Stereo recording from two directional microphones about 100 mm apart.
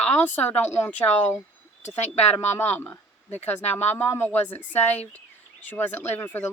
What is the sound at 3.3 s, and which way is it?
Speech, 90° left.